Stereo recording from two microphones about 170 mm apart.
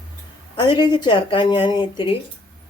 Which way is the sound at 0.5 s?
25° left (ahead or behind).